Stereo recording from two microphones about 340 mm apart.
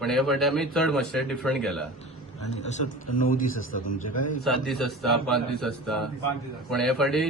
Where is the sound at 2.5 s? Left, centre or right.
Centre.